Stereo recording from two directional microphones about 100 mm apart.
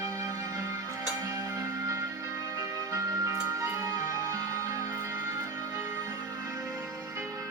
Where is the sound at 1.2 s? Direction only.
35° right (ahead or behind).